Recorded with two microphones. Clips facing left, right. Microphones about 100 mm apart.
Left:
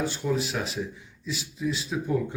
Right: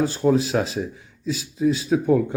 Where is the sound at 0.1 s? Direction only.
40° right (ahead or behind).